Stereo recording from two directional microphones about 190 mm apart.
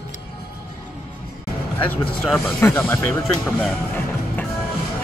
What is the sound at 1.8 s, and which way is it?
Speech, 10° left (ahead or behind).